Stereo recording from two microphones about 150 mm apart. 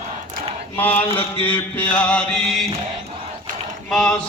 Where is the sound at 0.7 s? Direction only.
10° left (ahead or behind).